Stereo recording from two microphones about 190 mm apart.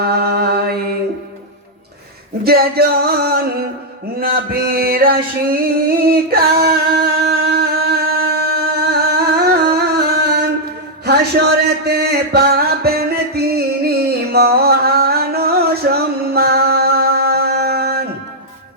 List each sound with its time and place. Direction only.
0.0 s mantra: 55° right (ahead or behind)
2.4 s music: 55° right (ahead or behind)
11.0 s a sound: 55° right (ahead or behind)